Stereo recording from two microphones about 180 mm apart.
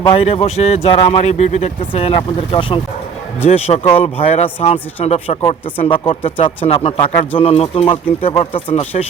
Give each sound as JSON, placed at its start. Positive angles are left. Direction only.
{"t": 0.0, "sound": "speech", "side_deg": 35}